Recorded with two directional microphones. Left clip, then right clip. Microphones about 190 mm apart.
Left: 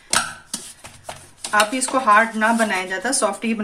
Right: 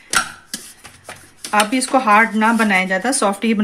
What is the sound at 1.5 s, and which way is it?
Speech, 35° right (ahead or behind).